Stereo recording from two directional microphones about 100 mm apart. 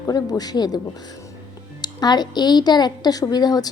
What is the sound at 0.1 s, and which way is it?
Speech, 40° left (ahead or behind).